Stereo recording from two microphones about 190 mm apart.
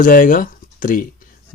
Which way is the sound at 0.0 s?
45° left (ahead or behind).